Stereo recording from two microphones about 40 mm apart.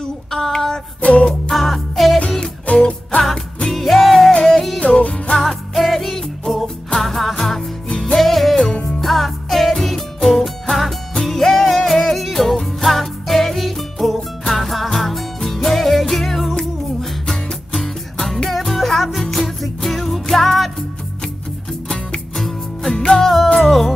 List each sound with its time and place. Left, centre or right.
0.3 s female singing: centre
1.5 s music: centre
2.6 s music: left
3.7 s music: centre
4.7 s music: left
5.4 s music: centre
18.5 s music: centre
22.4 s music: centre